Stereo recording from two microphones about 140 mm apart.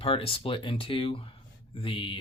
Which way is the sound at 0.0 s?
45° left (ahead or behind).